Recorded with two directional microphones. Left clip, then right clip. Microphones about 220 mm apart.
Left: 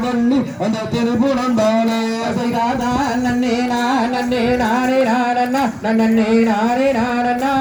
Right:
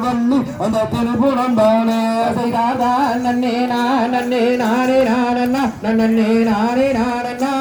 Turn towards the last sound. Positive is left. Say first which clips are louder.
# even
turn(degrees=-55)  # may be behind; listen again after turning